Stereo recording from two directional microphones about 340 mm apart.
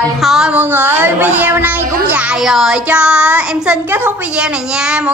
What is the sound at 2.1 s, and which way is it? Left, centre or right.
A child's voice, centre.